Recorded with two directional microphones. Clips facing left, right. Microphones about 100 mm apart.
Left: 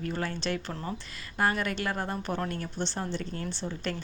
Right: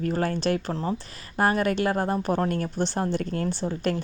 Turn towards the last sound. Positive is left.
turn(degrees=-45)  # may be behind; listen again after turning